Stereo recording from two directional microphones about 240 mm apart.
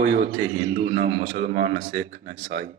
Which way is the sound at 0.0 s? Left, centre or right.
Right.